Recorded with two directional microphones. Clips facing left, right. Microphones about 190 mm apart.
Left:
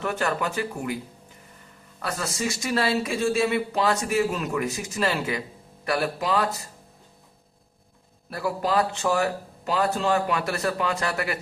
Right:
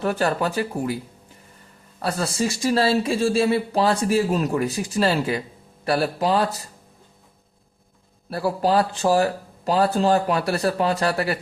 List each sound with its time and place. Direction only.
0.0 s speech: 35° right (ahead or behind)
2.0 s speech: 35° right (ahead or behind)
8.3 s speech: 35° right (ahead or behind)